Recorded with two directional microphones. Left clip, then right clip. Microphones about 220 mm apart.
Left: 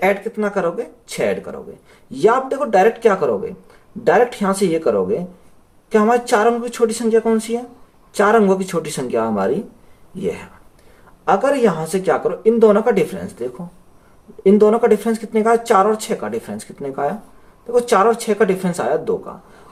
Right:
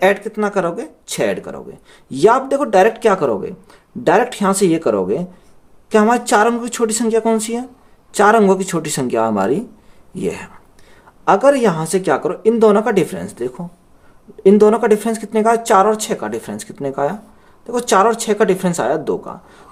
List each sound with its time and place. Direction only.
0.0 s speech: 45° right (ahead or behind)